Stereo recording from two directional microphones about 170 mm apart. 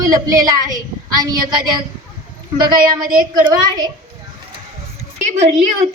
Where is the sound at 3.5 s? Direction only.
25° right (ahead or behind).